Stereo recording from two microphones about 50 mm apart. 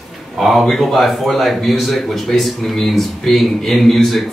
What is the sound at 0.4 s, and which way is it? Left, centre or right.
Speech, centre.